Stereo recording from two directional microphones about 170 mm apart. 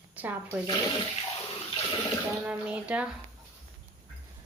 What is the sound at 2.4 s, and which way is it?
Speech, 5° right (ahead or behind).